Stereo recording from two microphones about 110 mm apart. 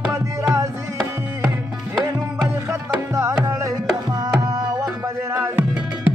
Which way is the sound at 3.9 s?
35° right (ahead or behind).